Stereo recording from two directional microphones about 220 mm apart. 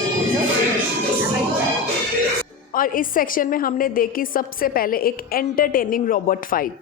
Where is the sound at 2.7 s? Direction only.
40° left (ahead or behind).